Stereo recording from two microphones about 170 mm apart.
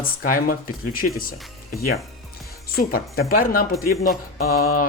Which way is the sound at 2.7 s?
60° left (ahead or behind).